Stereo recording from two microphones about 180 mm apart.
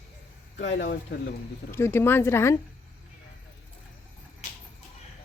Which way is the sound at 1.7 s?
15° left (ahead or behind).